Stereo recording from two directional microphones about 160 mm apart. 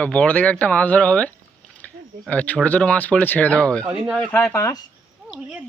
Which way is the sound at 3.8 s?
10° right (ahead or behind).